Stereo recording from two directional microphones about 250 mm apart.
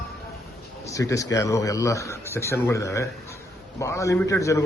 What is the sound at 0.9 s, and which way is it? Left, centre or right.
A man's voice, centre.